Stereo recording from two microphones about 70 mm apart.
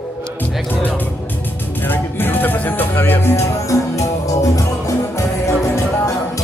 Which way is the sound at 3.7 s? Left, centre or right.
Left.